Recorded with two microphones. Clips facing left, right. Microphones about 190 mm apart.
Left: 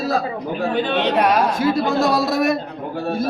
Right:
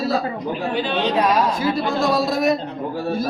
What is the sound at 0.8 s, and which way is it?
A man's voice, 60° left (ahead or behind).